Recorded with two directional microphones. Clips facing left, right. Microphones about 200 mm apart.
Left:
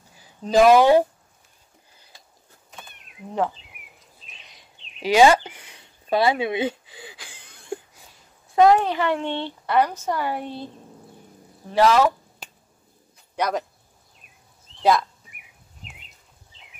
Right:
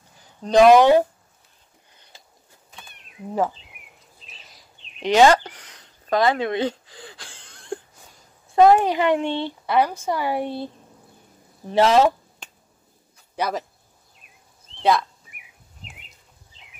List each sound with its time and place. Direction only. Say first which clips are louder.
0.2 s speech: right 2 dB; 5° left (ahead or behind)
4.4 s a sound: right 1 dB; centre (ahead or behind)
5.1 s a sound: even; 10° left (ahead or behind)
8.5 s speech: right 1 dB; 5° right (ahead or behind)
8.8 s speech: right 3 dB; 15° right (ahead or behind)
11.7 s speech: right 1 dB; 25° right (ahead or behind)
13.4 s speech: left 1 dB; 5° right (ahead or behind)
14.8 s speech: even; centre (ahead or behind)